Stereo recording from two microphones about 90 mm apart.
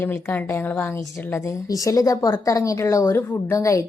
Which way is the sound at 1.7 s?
40° left (ahead or behind).